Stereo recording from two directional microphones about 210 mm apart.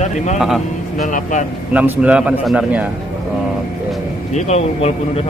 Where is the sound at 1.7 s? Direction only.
5° right (ahead or behind).